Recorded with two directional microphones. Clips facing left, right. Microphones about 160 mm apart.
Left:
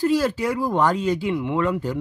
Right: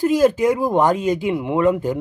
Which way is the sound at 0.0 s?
20° right (ahead or behind).